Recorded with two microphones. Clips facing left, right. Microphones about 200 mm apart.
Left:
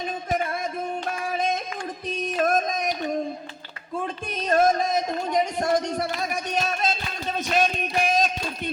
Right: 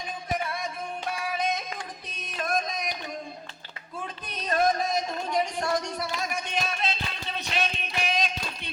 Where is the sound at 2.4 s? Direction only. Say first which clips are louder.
Left 6 dB; 45° left (ahead or behind).